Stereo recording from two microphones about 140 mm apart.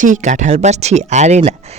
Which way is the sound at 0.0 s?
65° right (ahead or behind).